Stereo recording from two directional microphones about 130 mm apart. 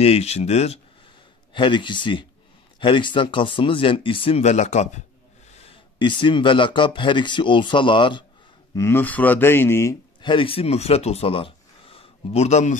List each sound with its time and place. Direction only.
0.0 s speech: 55° left (ahead or behind)
1.5 s speech: 40° left (ahead or behind)
4.4 s speech: 60° left (ahead or behind)
5.6 s speech: 40° left (ahead or behind)
8.7 s speech: 20° left (ahead or behind)
10.2 s speech: 40° left (ahead or behind); by 12.7 s 60° left (ahead or behind)